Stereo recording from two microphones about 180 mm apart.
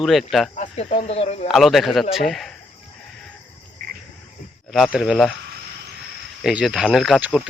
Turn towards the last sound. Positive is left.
turn(degrees=0)  # may be behind; listen again after turning